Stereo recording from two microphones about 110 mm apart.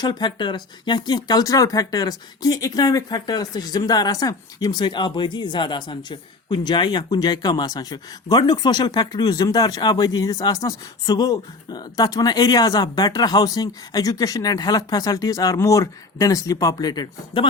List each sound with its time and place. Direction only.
0.0 s speech: 40° left (ahead or behind)